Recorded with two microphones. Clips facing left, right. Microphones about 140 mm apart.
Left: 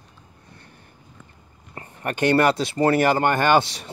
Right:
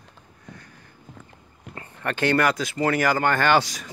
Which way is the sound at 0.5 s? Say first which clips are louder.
Right 2 dB; 25° left (ahead or behind).